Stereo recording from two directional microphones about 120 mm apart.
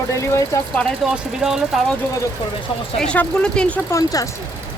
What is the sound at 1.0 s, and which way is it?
Speech, 5° right (ahead or behind).